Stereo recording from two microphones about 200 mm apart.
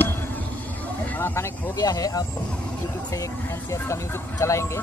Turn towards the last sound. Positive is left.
turn(degrees=15)  # may be behind; listen again after turning